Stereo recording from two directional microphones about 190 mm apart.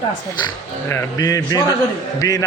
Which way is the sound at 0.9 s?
20° left (ahead or behind).